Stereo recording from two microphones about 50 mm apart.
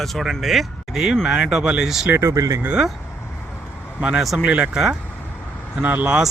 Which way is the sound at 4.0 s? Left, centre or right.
Centre.